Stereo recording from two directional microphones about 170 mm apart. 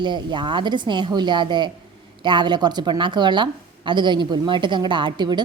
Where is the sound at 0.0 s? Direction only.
25° right (ahead or behind).